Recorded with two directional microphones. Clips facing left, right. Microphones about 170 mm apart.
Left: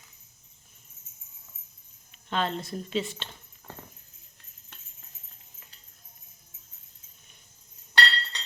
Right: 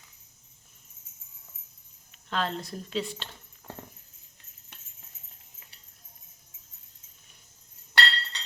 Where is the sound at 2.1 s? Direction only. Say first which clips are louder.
Left 2 dB; centre (ahead or behind).